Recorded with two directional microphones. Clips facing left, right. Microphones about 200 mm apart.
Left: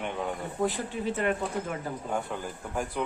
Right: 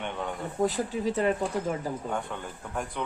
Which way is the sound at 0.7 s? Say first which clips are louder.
Right 3 dB; 40° right (ahead or behind).